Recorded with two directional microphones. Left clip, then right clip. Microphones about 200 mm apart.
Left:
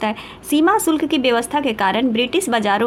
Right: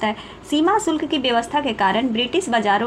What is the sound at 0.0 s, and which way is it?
A woman's voice, 30° left (ahead or behind).